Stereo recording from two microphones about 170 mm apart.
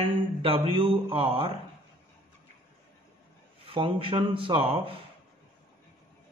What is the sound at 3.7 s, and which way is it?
Speech, 30° right (ahead or behind).